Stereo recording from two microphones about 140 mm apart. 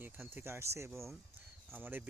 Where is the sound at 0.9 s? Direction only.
Centre (ahead or behind).